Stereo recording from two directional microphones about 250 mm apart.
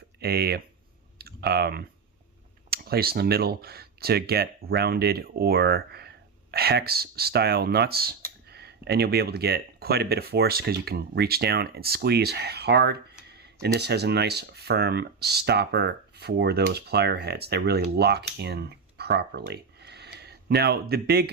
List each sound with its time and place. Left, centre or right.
0.2 s speech: right
1.2 s clicking: right
2.6 s speech: right